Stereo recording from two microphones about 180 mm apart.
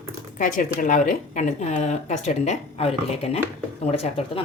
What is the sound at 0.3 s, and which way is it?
Speech, 45° left (ahead or behind).